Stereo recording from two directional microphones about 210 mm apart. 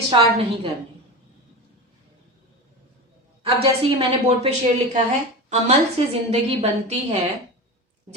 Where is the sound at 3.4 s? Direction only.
25° right (ahead or behind).